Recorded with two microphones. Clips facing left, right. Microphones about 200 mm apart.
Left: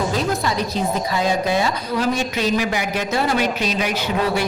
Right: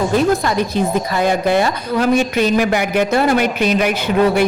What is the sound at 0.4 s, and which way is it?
A woman's voice, 55° right (ahead or behind).